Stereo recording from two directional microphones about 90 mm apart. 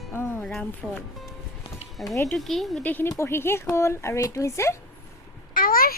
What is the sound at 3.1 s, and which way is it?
Speech, 30° left (ahead or behind).